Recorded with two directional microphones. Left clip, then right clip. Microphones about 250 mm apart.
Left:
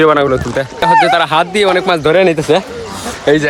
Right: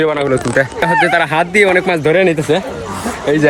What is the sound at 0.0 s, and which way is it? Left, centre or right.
Speech, left.